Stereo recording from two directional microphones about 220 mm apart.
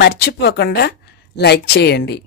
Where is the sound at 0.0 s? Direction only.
50° left (ahead or behind).